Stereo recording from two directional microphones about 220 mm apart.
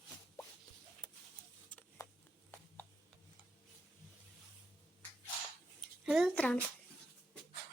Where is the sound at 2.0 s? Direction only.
15° left (ahead or behind).